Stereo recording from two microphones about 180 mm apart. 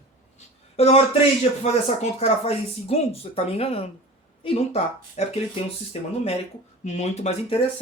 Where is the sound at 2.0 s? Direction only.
35° left (ahead or behind).